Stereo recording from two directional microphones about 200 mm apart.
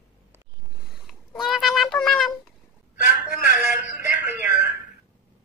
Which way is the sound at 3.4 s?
5° right (ahead or behind).